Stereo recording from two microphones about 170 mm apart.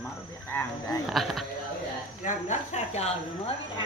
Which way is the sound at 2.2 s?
45° left (ahead or behind).